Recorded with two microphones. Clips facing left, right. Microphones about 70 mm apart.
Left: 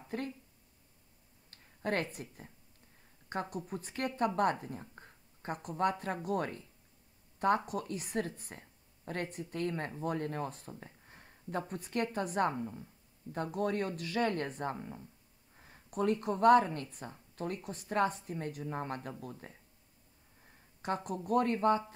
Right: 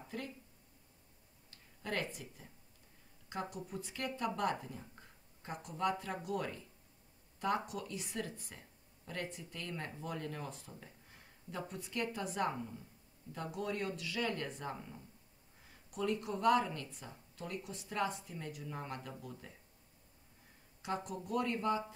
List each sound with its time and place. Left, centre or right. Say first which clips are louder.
0.1 s speech: left 6 dB; left
1.5 s a sound: left 6 dB; left
2.1 s speech: left 5 dB; left
11.1 s a sound: left 10 dB; left
11.7 s speech: left 4 dB; left
20.8 s speech: left 4 dB; left